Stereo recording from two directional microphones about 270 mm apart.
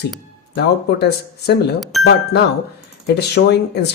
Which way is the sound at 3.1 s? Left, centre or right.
Left.